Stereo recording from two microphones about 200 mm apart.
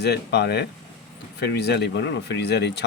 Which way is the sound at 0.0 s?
55° left (ahead or behind).